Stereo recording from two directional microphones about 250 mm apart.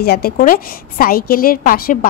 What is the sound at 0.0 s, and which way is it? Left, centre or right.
A woman's voice, left.